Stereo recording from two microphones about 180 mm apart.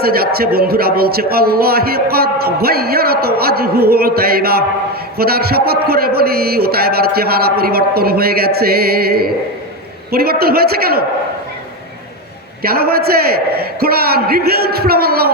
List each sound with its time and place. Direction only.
0.0 s a man's voice: 55° right (ahead or behind)
12.6 s a man's voice: 60° right (ahead or behind)